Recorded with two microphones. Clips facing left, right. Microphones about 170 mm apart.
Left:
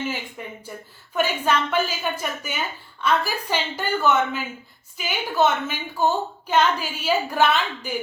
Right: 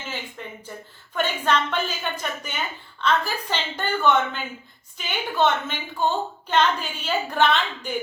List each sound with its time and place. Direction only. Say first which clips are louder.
0.4 s a woman's voice: left 1 dB; 10° left (ahead or behind)